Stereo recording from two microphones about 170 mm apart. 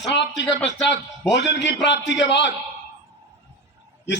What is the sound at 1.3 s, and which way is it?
A man's voice, 90° left.